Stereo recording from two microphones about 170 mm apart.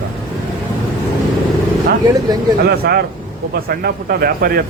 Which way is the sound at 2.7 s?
70° right (ahead or behind).